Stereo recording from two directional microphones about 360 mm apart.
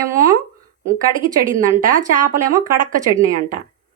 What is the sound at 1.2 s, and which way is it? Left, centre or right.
Speech, right.